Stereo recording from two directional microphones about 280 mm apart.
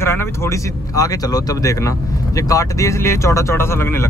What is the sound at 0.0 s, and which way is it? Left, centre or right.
Speech, centre.